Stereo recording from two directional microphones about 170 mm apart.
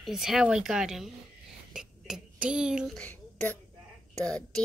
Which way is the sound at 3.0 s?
10° left (ahead or behind).